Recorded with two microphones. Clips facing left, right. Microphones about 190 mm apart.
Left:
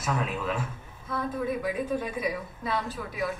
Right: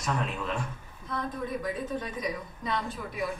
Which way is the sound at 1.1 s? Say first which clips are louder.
Left 2 dB; 5° left (ahead or behind).